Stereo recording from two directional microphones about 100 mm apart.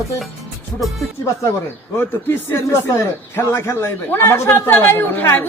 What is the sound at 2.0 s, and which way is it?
A man's voice, 25° left (ahead or behind).